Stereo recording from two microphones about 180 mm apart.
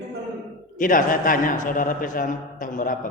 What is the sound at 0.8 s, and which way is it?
A man's voice, 50° left (ahead or behind).